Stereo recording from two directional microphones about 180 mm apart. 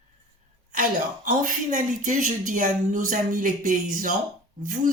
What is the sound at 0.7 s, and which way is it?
Speech, 50° right (ahead or behind).